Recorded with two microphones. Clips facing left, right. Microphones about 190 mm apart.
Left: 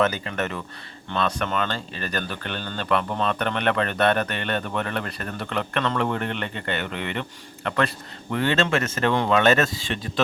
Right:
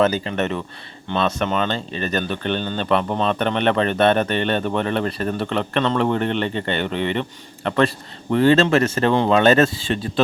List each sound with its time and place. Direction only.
0.0 s speech: 25° right (ahead or behind)